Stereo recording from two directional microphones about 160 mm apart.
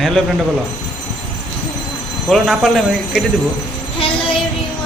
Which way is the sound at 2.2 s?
5° left (ahead or behind).